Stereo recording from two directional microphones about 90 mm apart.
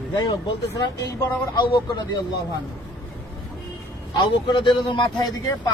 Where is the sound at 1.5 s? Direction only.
60° left (ahead or behind).